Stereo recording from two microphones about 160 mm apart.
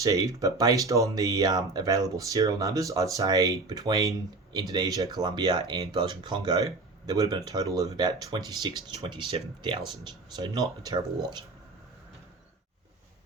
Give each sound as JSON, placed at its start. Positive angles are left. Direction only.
{"t": 0.0, "sound": "speech", "side_deg": -20}